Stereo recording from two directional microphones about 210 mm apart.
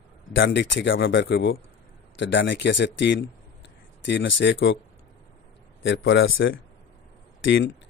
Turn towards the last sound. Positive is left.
turn(degrees=60)  # may be behind; listen again after turning